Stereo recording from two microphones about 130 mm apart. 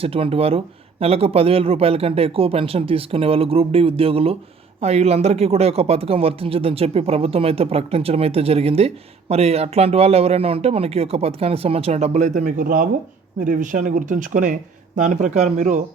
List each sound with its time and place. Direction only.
0.0 s speech: 50° right (ahead or behind); by 14.5 s 85° right
14.9 s speech: 70° right (ahead or behind)